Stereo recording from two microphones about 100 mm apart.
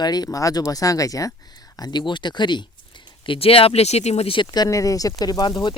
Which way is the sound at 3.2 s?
65° left (ahead or behind).